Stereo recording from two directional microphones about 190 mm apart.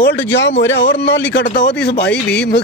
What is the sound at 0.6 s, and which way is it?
Speech, 65° left (ahead or behind).